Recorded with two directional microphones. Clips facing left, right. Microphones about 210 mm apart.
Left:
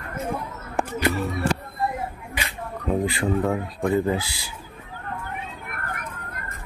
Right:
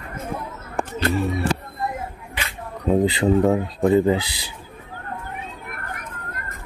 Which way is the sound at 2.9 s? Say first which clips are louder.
Right 6 dB; 20° right (ahead or behind).